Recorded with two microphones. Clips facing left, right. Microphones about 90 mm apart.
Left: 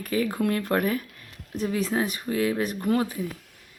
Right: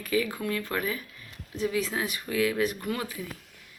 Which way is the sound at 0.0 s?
45° left (ahead or behind).